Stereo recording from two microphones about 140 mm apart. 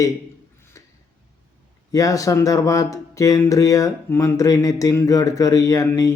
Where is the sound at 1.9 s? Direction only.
25° left (ahead or behind).